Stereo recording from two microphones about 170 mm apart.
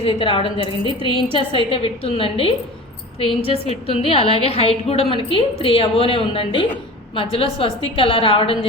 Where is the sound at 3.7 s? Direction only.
35° left (ahead or behind).